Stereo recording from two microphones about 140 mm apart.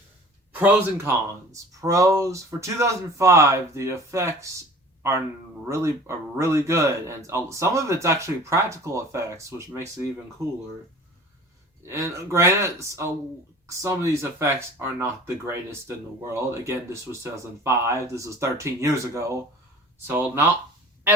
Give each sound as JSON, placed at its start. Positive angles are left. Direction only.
{"t": 0.6, "sound": "speech", "side_deg": -15}
{"t": 11.9, "sound": "speech", "side_deg": -20}